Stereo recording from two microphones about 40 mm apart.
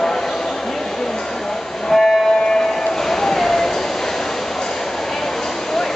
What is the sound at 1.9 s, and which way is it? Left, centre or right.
Train, centre.